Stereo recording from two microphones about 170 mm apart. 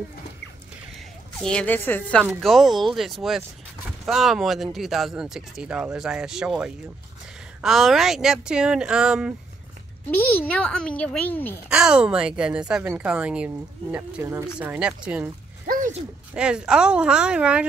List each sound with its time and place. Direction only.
1.4 s speech: 5° left (ahead or behind)
10.1 s speech: 10° left (ahead or behind)
11.7 s speech: 5° right (ahead or behind)
15.6 s a sound: 50° right (ahead or behind)
16.3 s speech: 5° right (ahead or behind)